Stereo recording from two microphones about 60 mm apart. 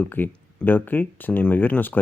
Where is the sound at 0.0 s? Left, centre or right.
Left.